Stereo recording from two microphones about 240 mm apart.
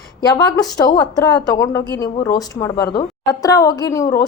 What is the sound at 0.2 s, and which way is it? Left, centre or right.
A woman's voice, centre.